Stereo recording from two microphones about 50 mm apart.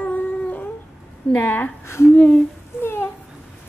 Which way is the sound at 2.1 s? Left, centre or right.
Left.